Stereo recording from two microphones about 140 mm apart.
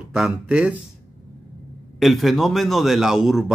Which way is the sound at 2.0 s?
Centre (ahead or behind).